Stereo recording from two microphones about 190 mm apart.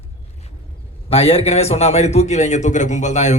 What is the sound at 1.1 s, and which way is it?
A man's voice, 30° left (ahead or behind).